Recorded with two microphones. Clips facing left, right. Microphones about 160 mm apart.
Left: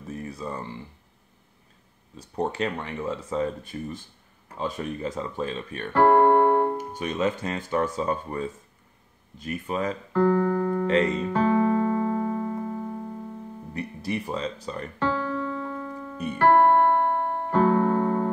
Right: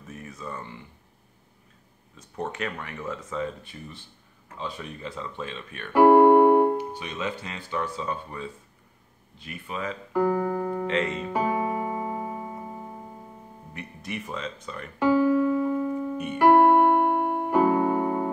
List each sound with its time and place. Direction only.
0.1 s speech: 35° left (ahead or behind)
2.1 s speech: 35° left (ahead or behind)
5.9 s keyboard: 10° right (ahead or behind)
6.8 s speech: 45° left (ahead or behind)
10.1 s keyboard: 10° right (ahead or behind)
10.9 s piano: 40° left (ahead or behind)
11.2 s music: 10° right (ahead or behind)
13.7 s speech: 35° left (ahead or behind)
15.0 s keyboard: 10° right (ahead or behind)